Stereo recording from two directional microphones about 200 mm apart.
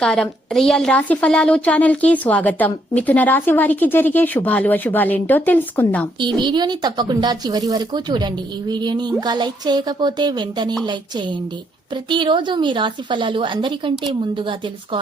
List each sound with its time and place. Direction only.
0.0 s a woman's voice: 5° left (ahead or behind)
6.1 s speech: 25° right (ahead or behind)
12.0 s speech: 25° right (ahead or behind)